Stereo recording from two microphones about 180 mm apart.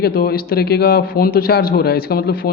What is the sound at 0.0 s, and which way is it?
A man's voice, 60° left (ahead or behind).